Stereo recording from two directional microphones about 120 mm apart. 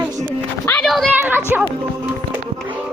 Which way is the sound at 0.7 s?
5° left (ahead or behind).